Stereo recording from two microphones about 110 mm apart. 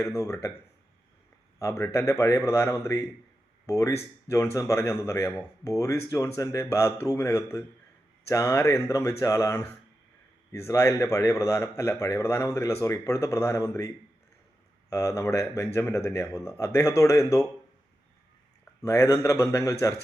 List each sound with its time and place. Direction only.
0.0 s a man's voice: 30° left (ahead or behind)
1.5 s a man's voice: 30° left (ahead or behind)
10.7 s a man's voice: 30° left (ahead or behind)
18.8 s a man's voice: 30° left (ahead or behind)